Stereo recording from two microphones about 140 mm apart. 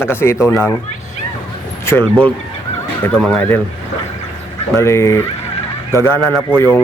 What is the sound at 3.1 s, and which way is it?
Speech, 5° left (ahead or behind).